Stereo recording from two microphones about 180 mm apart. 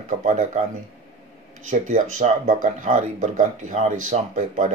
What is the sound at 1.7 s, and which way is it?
Speech, 45° right (ahead or behind).